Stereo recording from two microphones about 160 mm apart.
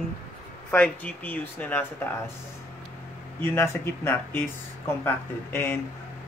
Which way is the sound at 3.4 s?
15° left (ahead or behind).